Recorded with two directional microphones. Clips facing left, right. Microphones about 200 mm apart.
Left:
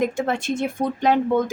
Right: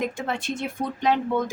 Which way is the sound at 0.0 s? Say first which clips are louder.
Left 5 dB; 45° left (ahead or behind).